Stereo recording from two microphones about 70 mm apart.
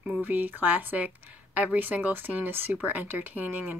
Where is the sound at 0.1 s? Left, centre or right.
Right.